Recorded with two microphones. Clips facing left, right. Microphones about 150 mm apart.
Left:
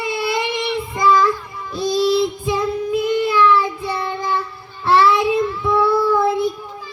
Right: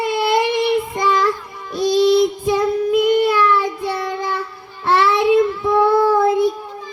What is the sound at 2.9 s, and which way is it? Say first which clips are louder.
Child singing: right 4 dB; 70° right (ahead or behind).